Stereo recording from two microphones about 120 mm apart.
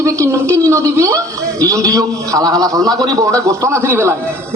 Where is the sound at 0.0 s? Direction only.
25° right (ahead or behind).